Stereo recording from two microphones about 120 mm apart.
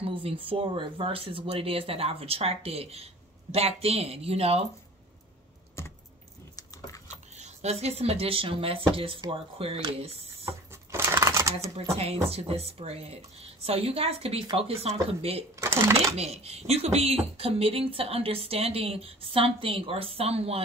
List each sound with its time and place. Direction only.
0.0 s speech: 50° right (ahead or behind)
5.8 s typing: 20° left (ahead or behind)
7.3 s speech: 65° right (ahead or behind)
10.4 s shuffling cards: 20° right (ahead or behind)
12.3 s speech: 55° right (ahead or behind)
15.6 s speech: 20° right (ahead or behind)
16.2 s speech: 60° right (ahead or behind)